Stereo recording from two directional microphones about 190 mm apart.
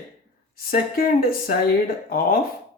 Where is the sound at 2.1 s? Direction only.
50° left (ahead or behind).